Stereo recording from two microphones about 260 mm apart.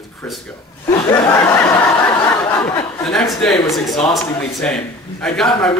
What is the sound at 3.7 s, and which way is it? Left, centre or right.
Speech, centre.